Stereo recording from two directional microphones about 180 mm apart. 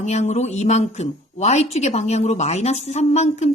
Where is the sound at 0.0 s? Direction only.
40° left (ahead or behind).